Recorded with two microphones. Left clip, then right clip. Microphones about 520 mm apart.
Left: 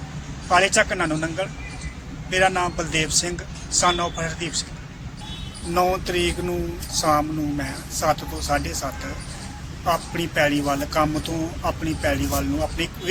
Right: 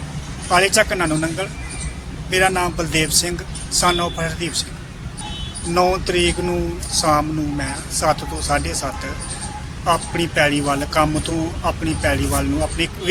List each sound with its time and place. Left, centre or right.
0.5 s speech: left
5.7 s speech: left